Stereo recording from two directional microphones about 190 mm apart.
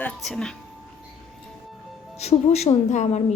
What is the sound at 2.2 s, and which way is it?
Speech, 35° left (ahead or behind).